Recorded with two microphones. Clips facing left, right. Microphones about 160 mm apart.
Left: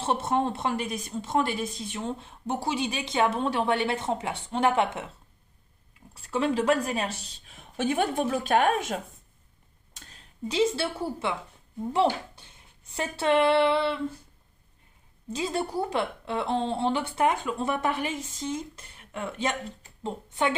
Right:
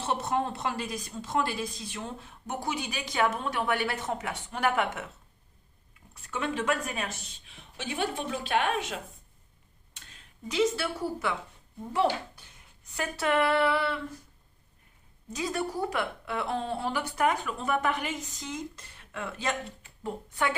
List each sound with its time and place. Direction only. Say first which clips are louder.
0.0 s a woman's voice: left 3 dB; 30° left (ahead or behind)
6.2 s a woman's voice: left 6 dB; 30° left (ahead or behind)
15.3 s a woman's voice: left 2 dB; 25° left (ahead or behind)